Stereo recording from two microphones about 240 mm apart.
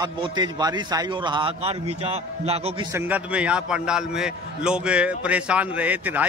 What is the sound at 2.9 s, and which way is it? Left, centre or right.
A man's voice, centre.